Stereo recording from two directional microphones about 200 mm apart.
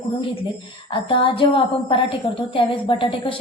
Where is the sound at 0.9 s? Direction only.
25° left (ahead or behind).